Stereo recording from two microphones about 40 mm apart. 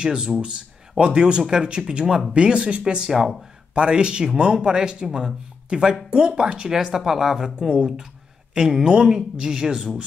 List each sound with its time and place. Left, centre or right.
0.0 s speech: right
3.1 s speech: centre
3.7 s speech: right
6.7 s speech: centre
7.5 s speech: right